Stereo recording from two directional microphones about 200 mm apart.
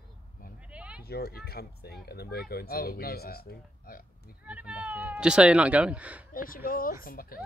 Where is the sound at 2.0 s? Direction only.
50° left (ahead or behind).